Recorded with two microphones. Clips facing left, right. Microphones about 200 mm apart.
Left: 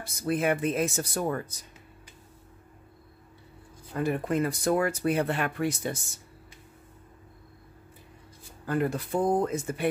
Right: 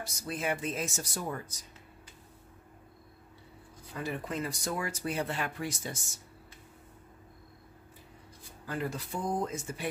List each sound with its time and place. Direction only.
0.0 s speech: 55° left (ahead or behind)
3.9 s speech: 55° left (ahead or behind)
8.6 s speech: 55° left (ahead or behind)